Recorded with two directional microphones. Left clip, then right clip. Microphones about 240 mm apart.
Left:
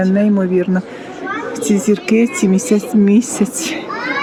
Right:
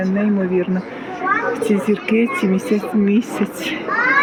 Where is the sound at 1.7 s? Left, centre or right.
Left.